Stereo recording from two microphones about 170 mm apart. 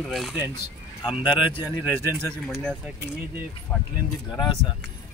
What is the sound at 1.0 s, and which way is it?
Speech, 25° left (ahead or behind).